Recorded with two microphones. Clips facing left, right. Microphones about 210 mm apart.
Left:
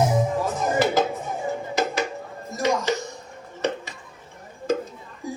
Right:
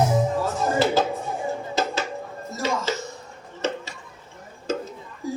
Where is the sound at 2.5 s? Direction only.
15° left (ahead or behind).